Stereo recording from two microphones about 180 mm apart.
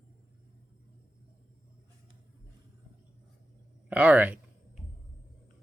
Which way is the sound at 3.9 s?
10° right (ahead or behind).